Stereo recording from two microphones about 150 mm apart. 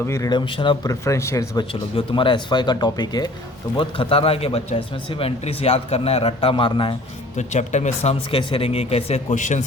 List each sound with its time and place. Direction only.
0.0 s speech: 20° left (ahead or behind)
0.9 s speech: 20° left (ahead or behind)
1.7 s a man's voice: 35° left (ahead or behind)
7.3 s speech: 50° left (ahead or behind)
9.3 s speech: 55° left (ahead or behind)